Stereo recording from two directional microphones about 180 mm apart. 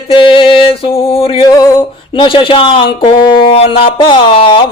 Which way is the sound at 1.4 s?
20° left (ahead or behind).